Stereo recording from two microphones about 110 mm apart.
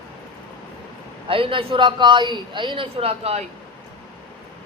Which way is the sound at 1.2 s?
55° right (ahead or behind).